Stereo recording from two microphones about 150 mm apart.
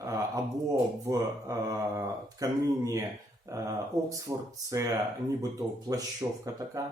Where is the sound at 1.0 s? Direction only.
20° right (ahead or behind).